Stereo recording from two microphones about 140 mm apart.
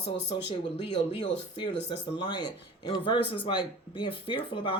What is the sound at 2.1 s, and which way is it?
Speech, 35° left (ahead or behind).